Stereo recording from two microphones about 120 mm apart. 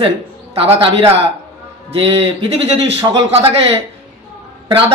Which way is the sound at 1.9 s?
50° right (ahead or behind).